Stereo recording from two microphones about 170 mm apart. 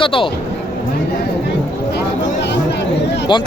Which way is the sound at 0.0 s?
30° left (ahead or behind).